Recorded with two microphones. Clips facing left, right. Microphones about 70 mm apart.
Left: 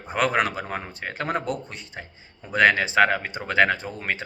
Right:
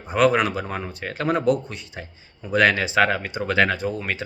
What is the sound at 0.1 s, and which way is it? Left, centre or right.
Speech, left.